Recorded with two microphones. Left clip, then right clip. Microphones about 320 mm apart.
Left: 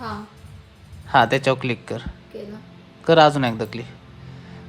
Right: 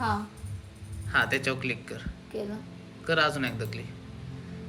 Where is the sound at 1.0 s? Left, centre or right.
Centre.